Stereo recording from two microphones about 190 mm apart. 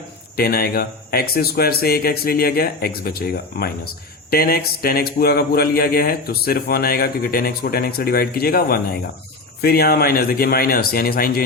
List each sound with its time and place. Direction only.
0.3 s speech: 50° left (ahead or behind)